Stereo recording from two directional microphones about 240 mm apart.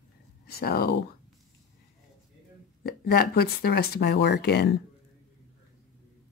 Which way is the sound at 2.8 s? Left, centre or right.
Left.